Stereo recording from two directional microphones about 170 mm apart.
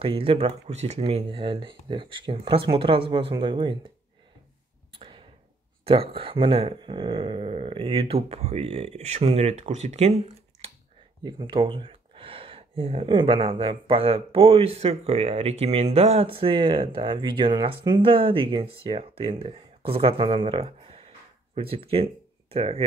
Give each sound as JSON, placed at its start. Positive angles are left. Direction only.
{"t": 0.0, "sound": "speech", "side_deg": -30}
{"t": 4.9, "sound": "a sound", "side_deg": -30}
{"t": 5.9, "sound": "speech", "side_deg": -35}
{"t": 11.2, "sound": "speech", "side_deg": -30}